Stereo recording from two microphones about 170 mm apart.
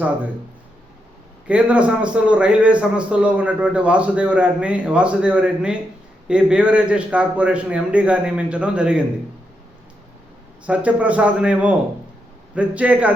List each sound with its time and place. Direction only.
1.5 s a man's voice: 10° right (ahead or behind)
10.7 s a man's voice: 10° right (ahead or behind)